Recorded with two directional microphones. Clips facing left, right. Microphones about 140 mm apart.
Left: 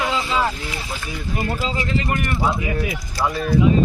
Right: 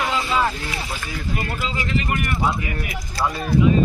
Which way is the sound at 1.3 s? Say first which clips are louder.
Left 4 dB; 30° left (ahead or behind).